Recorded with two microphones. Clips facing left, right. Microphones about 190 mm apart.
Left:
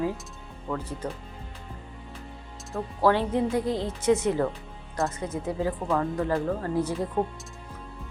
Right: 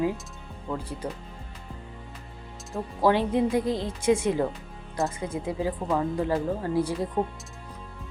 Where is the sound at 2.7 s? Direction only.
10° right (ahead or behind).